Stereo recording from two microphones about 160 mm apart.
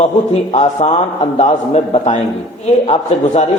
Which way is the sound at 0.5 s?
45° left (ahead or behind).